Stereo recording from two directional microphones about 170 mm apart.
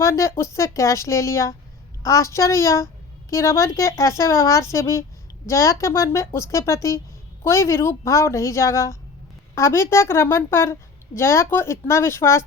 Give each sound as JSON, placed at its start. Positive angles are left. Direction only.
{"t": 0.0, "sound": "a woman's voice", "side_deg": 15}